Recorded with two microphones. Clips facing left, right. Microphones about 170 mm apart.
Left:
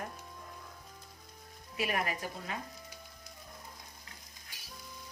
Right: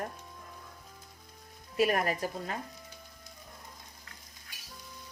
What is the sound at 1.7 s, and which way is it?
Speech, 40° right (ahead or behind).